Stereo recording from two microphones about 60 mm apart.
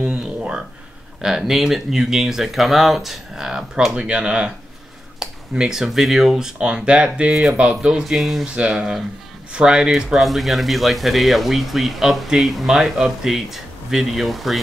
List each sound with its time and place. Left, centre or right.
0.0 s a sound: centre
1.2 s speech: centre
8.5 s speech: centre
12.7 s speech: centre